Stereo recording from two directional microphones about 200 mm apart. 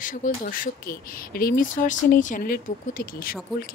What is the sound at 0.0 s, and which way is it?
A woman's voice, 40° left (ahead or behind).